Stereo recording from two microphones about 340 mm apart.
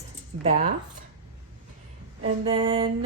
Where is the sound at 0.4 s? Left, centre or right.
Right.